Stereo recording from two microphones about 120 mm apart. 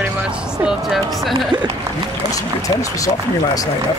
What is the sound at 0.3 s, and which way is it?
Speech, 5° right (ahead or behind).